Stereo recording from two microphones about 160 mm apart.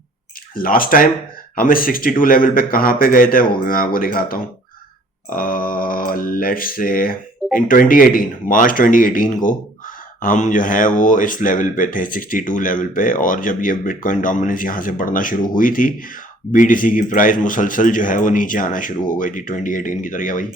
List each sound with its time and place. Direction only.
0.5 s speech: 60° left (ahead or behind)